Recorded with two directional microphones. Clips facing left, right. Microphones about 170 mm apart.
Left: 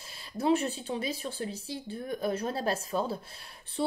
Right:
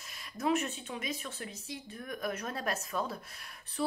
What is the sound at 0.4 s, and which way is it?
Speech, 30° left (ahead or behind).